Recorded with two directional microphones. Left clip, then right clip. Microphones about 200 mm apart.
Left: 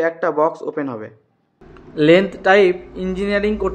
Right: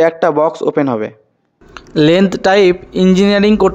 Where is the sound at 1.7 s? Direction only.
55° right (ahead or behind).